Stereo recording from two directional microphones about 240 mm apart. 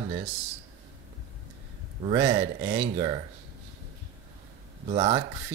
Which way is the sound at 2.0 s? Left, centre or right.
Centre.